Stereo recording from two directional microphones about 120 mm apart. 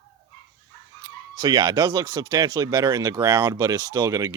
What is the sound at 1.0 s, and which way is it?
Speech, 30° right (ahead or behind).